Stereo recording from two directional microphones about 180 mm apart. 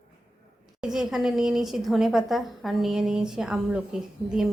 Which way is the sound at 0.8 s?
5° right (ahead or behind).